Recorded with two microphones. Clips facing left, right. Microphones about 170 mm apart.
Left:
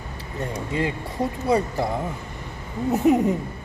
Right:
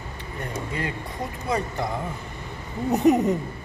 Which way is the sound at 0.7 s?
25° left (ahead or behind).